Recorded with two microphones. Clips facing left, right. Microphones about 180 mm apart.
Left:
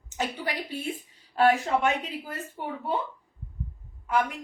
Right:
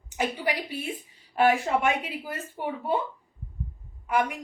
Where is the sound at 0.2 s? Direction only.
10° right (ahead or behind).